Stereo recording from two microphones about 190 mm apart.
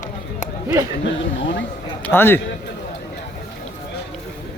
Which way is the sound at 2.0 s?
10° left (ahead or behind).